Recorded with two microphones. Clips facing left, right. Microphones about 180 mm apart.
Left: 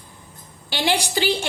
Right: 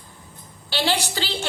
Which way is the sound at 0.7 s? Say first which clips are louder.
Left 2 dB; 15° left (ahead or behind).